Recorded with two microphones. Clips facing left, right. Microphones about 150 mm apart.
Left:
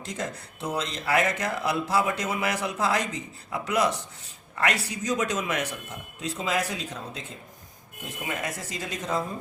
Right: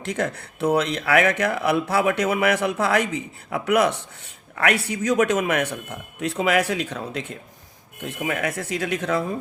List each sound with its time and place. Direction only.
0.0 s speech: 65° right (ahead or behind)